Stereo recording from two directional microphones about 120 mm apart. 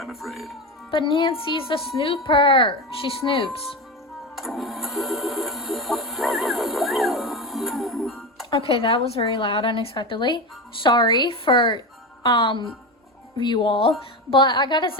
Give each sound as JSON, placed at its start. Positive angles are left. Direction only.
{"t": 0.0, "sound": "speech", "side_deg": 0}
{"t": 0.9, "sound": "a woman's voice", "side_deg": 45}
{"t": 4.4, "sound": "printer", "side_deg": 0}
{"t": 8.4, "sound": "a woman's voice", "side_deg": 50}